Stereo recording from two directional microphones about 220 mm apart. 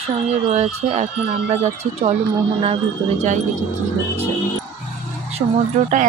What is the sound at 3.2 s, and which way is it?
Speech, 35° right (ahead or behind).